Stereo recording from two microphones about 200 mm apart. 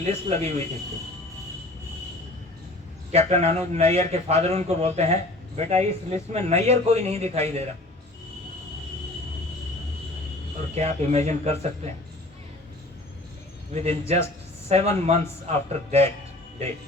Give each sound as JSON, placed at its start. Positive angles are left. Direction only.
{"t": 0.0, "sound": "a man's voice", "side_deg": -35}
{"t": 3.1, "sound": "a man's voice", "side_deg": -35}
{"t": 10.8, "sound": "a man's voice", "side_deg": -35}
{"t": 13.7, "sound": "a man's voice", "side_deg": -30}